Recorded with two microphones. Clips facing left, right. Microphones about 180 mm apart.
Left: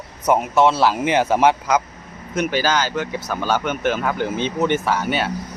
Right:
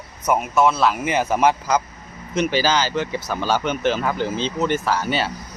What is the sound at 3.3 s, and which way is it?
Speech, 10° left (ahead or behind).